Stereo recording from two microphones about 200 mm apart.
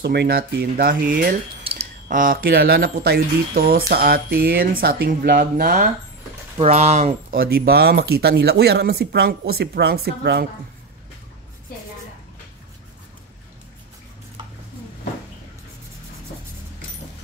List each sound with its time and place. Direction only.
0.0 s speech: 55° right (ahead or behind)
1.6 s speech: 30° right (ahead or behind)
6.6 s speech: 30° right (ahead or behind)
7.3 s speech: 50° right (ahead or behind)